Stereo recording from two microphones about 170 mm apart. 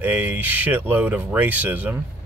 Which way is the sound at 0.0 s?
10° right (ahead or behind).